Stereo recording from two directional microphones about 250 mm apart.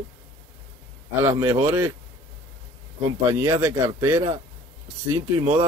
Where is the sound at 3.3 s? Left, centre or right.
Centre.